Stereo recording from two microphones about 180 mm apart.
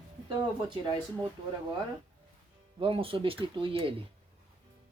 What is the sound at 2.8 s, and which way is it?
Speech, 30° right (ahead or behind).